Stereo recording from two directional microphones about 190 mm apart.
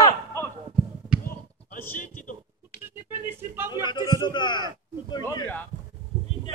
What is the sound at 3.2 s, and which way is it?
Speech, 10° right (ahead or behind).